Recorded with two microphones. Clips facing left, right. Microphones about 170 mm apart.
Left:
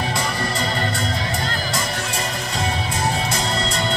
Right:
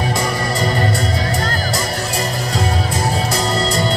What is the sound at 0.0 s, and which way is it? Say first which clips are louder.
Music: right 4 dB; 45° right (ahead or behind).